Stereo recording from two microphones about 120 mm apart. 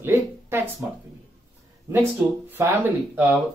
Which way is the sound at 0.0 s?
20° right (ahead or behind).